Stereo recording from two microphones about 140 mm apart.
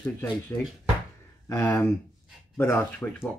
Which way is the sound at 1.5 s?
20° left (ahead or behind).